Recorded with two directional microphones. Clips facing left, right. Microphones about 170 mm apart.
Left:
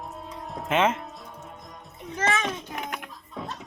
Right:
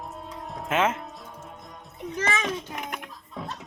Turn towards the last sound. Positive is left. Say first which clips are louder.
# even
turn(degrees=0)  # may be behind; listen again after turning